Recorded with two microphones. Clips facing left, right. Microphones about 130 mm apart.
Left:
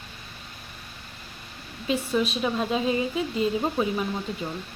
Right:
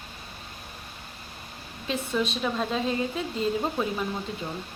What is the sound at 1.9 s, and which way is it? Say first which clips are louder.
A woman's voice: left 3 dB; 5° left (ahead or behind).